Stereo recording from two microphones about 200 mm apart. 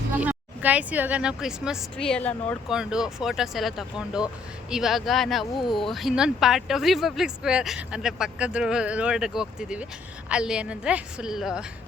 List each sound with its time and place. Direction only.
0.2 s speech: 5° right (ahead or behind)
5.5 s speech: 25° left (ahead or behind)
5.8 s speech: centre (ahead or behind)